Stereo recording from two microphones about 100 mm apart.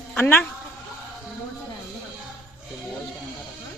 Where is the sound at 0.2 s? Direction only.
20° left (ahead or behind).